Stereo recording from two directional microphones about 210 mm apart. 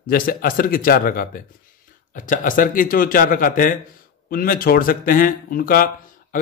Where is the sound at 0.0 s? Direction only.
45° left (ahead or behind).